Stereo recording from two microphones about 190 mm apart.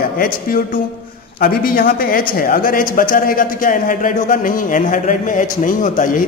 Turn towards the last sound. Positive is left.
turn(degrees=45)  # may be behind; listen again after turning